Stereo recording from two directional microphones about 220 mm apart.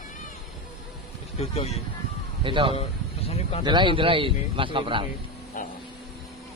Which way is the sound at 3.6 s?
20° right (ahead or behind).